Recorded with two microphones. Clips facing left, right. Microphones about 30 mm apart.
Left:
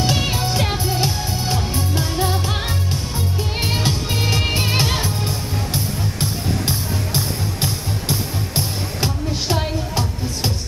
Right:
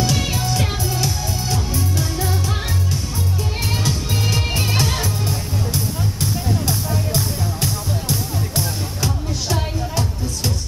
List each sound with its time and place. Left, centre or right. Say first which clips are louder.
0.0 s music: left 1 dB; left
6.7 s music: right 1 dB; left